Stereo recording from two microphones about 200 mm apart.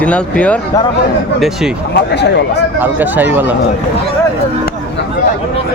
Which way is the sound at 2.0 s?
55° left (ahead or behind).